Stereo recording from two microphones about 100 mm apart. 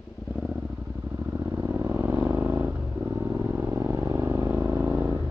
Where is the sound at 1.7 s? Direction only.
20° right (ahead or behind).